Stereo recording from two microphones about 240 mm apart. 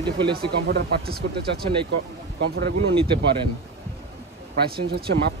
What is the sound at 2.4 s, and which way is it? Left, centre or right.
Speech, right.